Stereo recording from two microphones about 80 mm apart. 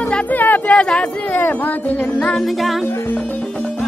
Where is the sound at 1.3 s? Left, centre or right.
Left.